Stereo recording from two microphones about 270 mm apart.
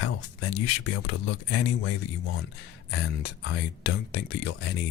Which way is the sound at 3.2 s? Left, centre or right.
Left.